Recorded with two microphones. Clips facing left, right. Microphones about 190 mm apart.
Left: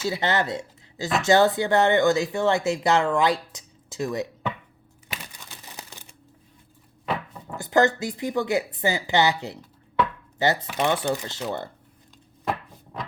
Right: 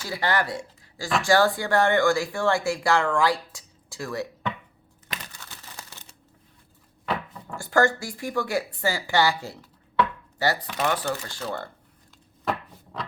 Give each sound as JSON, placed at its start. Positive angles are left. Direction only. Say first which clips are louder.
{"t": 0.0, "sound": "speech", "louder": "left 2 dB", "side_deg": 20}
{"t": 5.1, "sound": "crumpling", "louder": "even", "side_deg": 15}
{"t": 7.5, "sound": "speech", "louder": "left 2 dB", "side_deg": 20}